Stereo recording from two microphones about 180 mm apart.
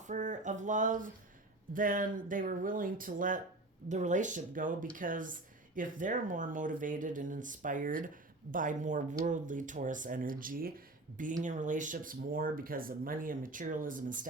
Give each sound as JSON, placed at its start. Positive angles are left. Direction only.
{"t": 0.0, "sound": "speech", "side_deg": -45}